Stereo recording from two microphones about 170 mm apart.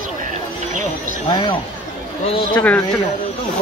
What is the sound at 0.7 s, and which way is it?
Music, 55° right (ahead or behind).